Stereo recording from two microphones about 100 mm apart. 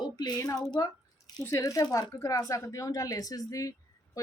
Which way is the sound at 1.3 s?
40° left (ahead or behind).